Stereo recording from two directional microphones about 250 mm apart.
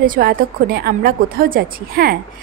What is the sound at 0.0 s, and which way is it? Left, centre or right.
A woman's voice, right.